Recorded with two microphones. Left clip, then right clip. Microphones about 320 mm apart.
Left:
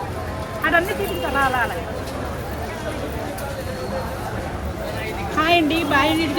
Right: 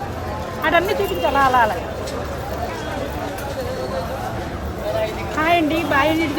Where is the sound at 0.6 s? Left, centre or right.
Centre.